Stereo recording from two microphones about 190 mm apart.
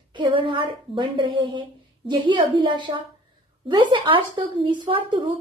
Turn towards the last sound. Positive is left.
turn(degrees=-25)  # may be behind; listen again after turning